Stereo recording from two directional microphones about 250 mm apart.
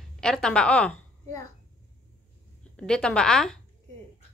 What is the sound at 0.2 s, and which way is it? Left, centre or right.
Speech, centre.